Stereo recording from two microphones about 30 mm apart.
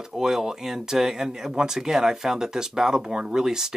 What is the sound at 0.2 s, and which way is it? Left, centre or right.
Speech, centre.